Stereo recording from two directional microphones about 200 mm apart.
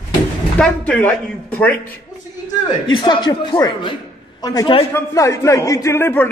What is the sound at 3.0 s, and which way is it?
A man's voice, 20° left (ahead or behind).